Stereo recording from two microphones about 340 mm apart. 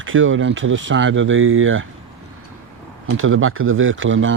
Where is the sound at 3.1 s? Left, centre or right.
Right.